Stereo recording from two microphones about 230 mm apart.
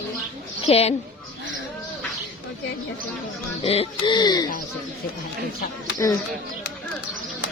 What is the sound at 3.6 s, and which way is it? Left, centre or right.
Speech, left.